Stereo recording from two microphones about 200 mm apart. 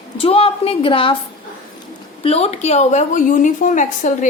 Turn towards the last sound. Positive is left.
turn(degrees=40)  # may be behind; listen again after turning